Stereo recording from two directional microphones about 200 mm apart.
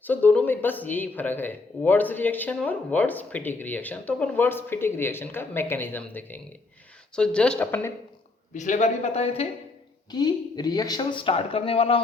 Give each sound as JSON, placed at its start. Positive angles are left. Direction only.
{"t": 0.0, "sound": "speech", "side_deg": 10}
{"t": 8.5, "sound": "speech", "side_deg": 40}
{"t": 10.1, "sound": "speech", "side_deg": 20}